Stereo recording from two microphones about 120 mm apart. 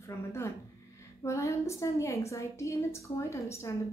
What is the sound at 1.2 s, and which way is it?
A woman's voice, 25° left (ahead or behind).